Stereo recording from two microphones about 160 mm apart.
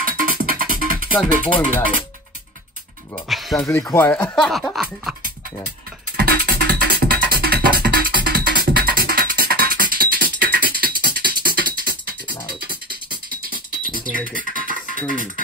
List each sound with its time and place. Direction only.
0.0 s music: 60° right (ahead or behind)
3.3 s music: centre (ahead or behind)
3.6 s speech: 15° left (ahead or behind); by 5.1 s centre (ahead or behind)
6.1 s music: 70° right (ahead or behind)